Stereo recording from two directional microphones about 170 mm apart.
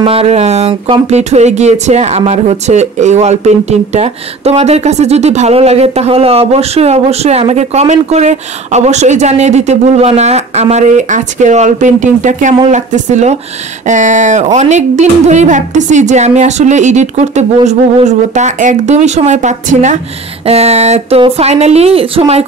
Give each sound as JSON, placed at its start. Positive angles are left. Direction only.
{"t": 0.0, "sound": "speech", "side_deg": -35}